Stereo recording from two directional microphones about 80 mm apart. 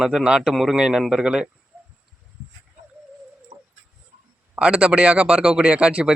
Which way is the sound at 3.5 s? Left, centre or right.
Right.